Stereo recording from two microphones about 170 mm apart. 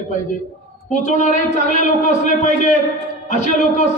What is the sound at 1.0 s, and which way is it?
A man's voice, 45° left (ahead or behind).